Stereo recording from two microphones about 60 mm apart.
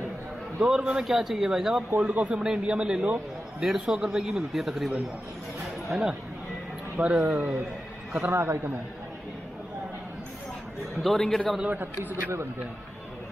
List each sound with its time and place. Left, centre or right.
0.6 s a man's voice: centre
2.0 s a man's voice: right; by 6.1 s centre
7.0 s a man's voice: right
8.3 s a man's voice: right
11.0 s a man's voice: centre
11.6 s a man's voice: right